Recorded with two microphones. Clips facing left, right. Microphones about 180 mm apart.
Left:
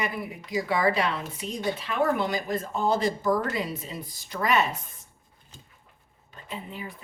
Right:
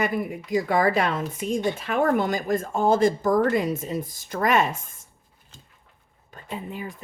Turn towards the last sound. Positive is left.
turn(degrees=-45)  # may be behind; listen again after turning